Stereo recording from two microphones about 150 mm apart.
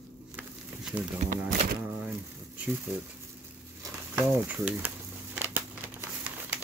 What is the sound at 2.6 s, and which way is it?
Speech, 10° right (ahead or behind).